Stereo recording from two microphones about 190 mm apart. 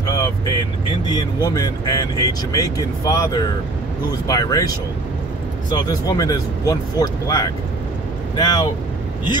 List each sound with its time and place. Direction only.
0.0 s speech: 20° left (ahead or behind)